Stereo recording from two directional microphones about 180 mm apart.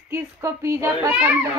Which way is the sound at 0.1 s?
15° right (ahead or behind).